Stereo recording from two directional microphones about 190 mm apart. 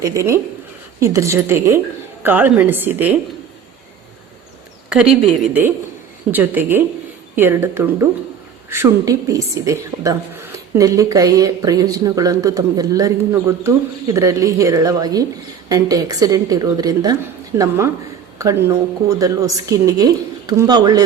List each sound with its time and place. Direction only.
0.0 s a woman's voice: 15° right (ahead or behind)
5.2 s a woman's voice: 5° right (ahead or behind); by 21.0 s 20° right (ahead or behind)